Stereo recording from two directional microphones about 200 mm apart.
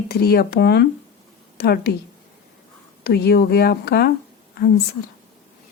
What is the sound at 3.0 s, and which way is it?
Speech, 50° left (ahead or behind).